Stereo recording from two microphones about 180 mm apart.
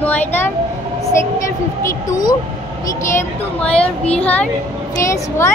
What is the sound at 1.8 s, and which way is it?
Speech, 20° left (ahead or behind).